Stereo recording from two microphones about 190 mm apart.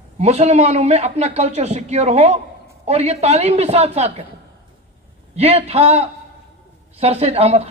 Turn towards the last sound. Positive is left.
turn(degrees=-35)  # may be behind; listen again after turning